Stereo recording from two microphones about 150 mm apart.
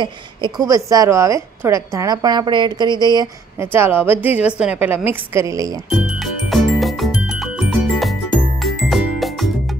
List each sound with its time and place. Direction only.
0.0 s a woman's voice: 30° right (ahead or behind)
3.5 s a woman's voice: 15° right (ahead or behind)
5.9 s music: centre (ahead or behind)